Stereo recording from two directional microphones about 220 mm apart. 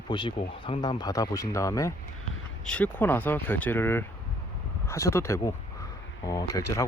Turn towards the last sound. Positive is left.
turn(degrees=15)  # may be behind; listen again after turning